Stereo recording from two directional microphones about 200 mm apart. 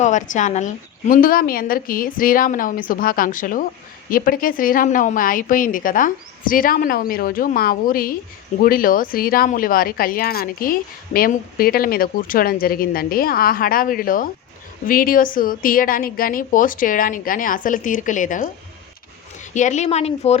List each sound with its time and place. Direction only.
0.0 s speech: 40° left (ahead or behind)
19.5 s speech: 35° left (ahead or behind)